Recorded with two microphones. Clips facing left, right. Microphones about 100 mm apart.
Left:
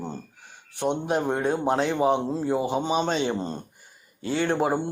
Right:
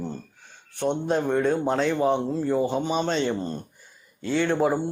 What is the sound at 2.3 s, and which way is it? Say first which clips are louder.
Speech: right 1 dB; 25° left (ahead or behind).